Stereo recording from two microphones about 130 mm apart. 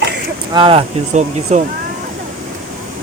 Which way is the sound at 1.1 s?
65° right (ahead or behind).